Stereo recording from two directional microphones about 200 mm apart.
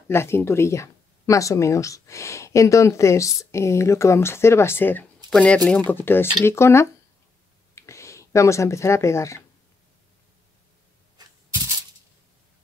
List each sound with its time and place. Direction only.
0.1 s speech: 10° left (ahead or behind)